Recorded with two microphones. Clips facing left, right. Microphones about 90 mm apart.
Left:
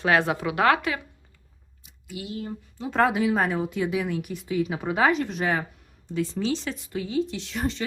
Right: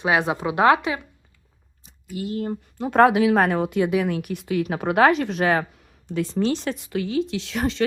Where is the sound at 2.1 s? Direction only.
45° right (ahead or behind); by 5.7 s 80° right.